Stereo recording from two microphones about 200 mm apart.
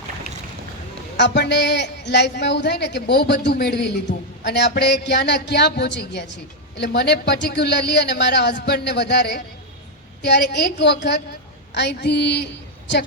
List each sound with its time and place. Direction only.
1.1 s a woman's voice: 60° left (ahead or behind)